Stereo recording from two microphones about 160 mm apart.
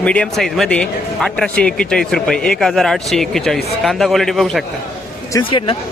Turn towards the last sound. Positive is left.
turn(degrees=20)  # may be behind; listen again after turning